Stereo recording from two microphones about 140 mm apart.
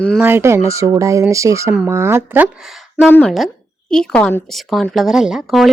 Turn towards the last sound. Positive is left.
turn(degrees=0)  # may be behind; listen again after turning